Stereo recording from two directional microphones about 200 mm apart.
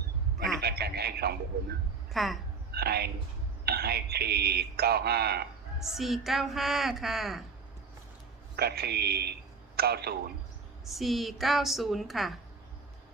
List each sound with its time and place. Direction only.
0.6 s a man's voice: 50° right (ahead or behind)
2.1 s a woman's voice: centre (ahead or behind)
2.7 s a man's voice: 50° right (ahead or behind)
5.8 s a woman's voice: centre (ahead or behind)
8.5 s speech: 50° right (ahead or behind)
10.8 s a woman's voice: centre (ahead or behind)